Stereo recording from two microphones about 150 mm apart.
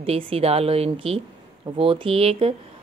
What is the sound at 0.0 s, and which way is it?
Speech, 40° right (ahead or behind).